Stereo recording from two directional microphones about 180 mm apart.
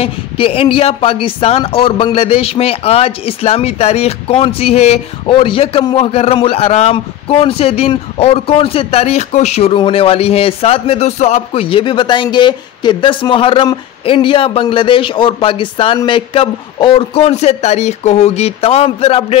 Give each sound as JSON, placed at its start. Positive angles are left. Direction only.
{"t": 0.0, "sound": "speech", "side_deg": 30}